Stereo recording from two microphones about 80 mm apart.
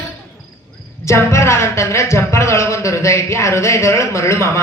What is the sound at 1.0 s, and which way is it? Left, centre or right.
Speech, left.